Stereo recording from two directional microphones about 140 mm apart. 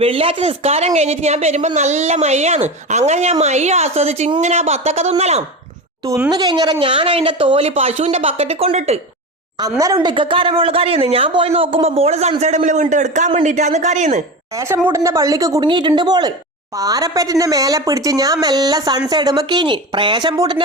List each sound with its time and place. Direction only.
0.0 s a woman's voice: 40° right (ahead or behind)
6.3 s speech: 30° right (ahead or behind); by 9.0 s 45° right (ahead or behind)
9.6 s a man's voice: 25° right (ahead or behind); by 14.2 s 55° right (ahead or behind)
14.5 s speech: 20° right (ahead or behind)
15.7 s speech: 35° right (ahead or behind)